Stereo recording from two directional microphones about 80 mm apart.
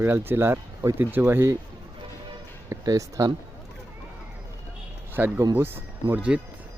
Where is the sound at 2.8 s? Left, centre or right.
Right.